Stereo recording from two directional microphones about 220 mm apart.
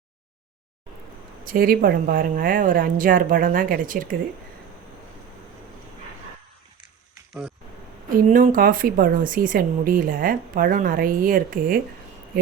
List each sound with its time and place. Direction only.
1.5 s speech: 40° right (ahead or behind)
8.3 s speech: 40° right (ahead or behind)